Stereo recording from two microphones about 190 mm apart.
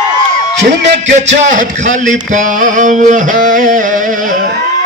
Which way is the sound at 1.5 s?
40° right (ahead or behind).